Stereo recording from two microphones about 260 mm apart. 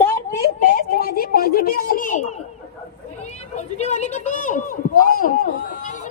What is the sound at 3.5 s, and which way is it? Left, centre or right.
A man's voice, left.